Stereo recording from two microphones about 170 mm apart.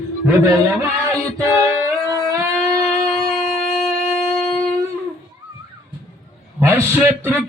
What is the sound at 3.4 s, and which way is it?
Wind instrument, 5° left (ahead or behind).